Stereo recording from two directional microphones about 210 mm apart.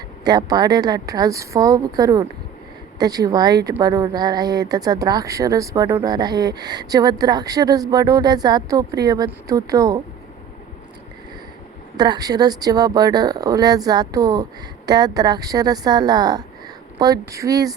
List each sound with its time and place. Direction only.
0.3 s speech: 20° right (ahead or behind)
11.9 s speech: 20° right (ahead or behind)